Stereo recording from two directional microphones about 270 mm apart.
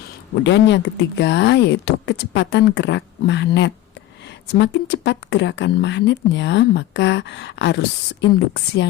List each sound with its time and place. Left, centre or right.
0.4 s speech: left